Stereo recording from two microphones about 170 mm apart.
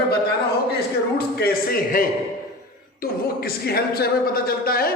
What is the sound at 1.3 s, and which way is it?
Speech, 65° left (ahead or behind).